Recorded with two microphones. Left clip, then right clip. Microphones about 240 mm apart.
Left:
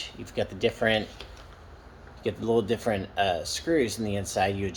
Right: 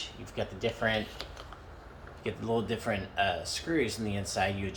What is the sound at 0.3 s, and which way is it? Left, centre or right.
Speech, left.